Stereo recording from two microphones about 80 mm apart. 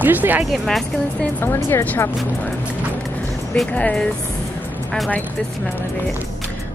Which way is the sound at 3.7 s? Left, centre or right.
Centre.